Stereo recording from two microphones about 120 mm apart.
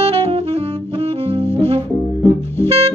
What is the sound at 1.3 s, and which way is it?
Music, 55° right (ahead or behind).